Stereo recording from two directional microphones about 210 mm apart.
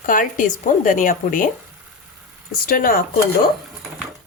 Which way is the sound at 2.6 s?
45° left (ahead or behind).